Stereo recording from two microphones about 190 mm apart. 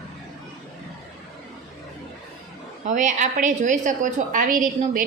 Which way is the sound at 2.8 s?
40° right (ahead or behind).